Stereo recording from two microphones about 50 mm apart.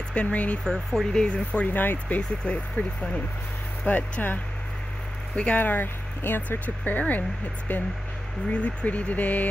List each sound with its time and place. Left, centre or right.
0.1 s speech: left
1.1 s speech: centre
1.7 s speech: left
2.4 s speech: centre
3.8 s speech: left
5.3 s speech: left
5.6 s speech: left
6.6 s speech: left
8.5 s speech: left